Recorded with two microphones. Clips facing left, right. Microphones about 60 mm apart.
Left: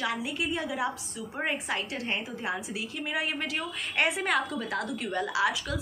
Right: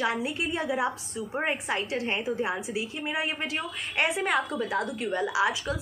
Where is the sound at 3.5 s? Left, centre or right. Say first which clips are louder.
Even; centre.